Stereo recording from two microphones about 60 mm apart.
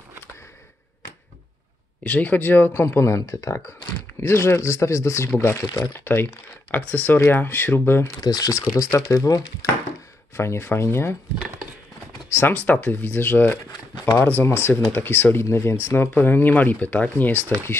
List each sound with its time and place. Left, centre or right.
2.0 s speech: left
2.7 s speech: left
6.7 s speech: left
8.2 s speech: left
8.7 s speech: left
10.3 s speech: left
12.3 s speech: left
12.5 s speech: left
16.2 s speech: left